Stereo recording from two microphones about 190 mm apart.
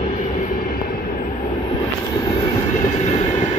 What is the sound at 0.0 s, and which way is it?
Train, 40° left (ahead or behind).